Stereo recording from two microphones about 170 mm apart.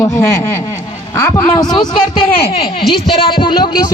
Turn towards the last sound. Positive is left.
turn(degrees=25)  # may be behind; listen again after turning